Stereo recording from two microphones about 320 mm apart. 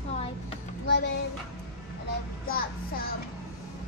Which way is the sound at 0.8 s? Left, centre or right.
Left.